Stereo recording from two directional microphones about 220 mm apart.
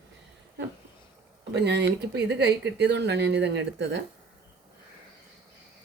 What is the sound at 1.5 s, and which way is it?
Speech, 50° right (ahead or behind).